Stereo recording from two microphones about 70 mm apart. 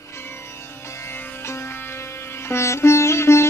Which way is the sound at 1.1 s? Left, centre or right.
Left.